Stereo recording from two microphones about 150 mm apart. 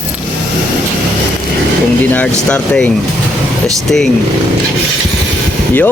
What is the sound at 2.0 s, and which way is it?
Speech, 10° left (ahead or behind).